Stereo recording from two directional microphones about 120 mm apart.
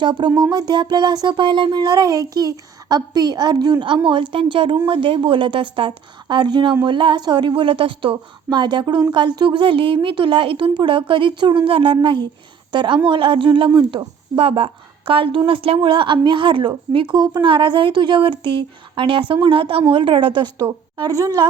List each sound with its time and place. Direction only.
0.0 s speech: 40° right (ahead or behind)
0.3 s speech: 10° right (ahead or behind)
0.5 s a woman's voice: 35° right (ahead or behind)
21.1 s speech: 30° right (ahead or behind)